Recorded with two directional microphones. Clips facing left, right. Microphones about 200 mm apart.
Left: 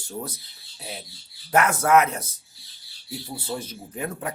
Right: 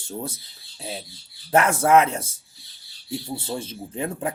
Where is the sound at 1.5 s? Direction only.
30° right (ahead or behind).